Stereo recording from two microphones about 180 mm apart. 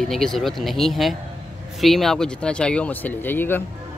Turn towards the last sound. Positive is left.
turn(degrees=10)  # may be behind; listen again after turning